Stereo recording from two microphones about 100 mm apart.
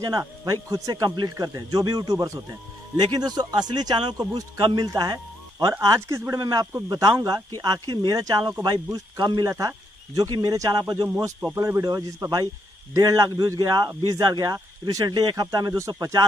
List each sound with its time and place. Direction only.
0.0 s a man's voice: 35° right (ahead or behind)